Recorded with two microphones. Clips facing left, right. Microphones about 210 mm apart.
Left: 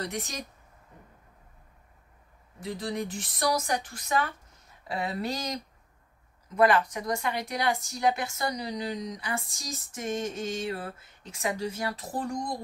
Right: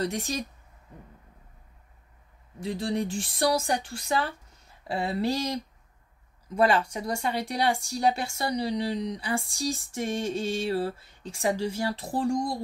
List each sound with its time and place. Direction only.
0.0 s a woman's voice: 30° right (ahead or behind)
2.6 s a woman's voice: 30° right (ahead or behind)